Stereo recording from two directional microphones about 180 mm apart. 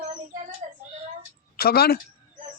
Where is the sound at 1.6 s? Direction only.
60° left (ahead or behind).